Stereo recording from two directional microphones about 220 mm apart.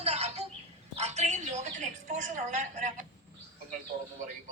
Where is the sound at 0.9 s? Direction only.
30° right (ahead or behind).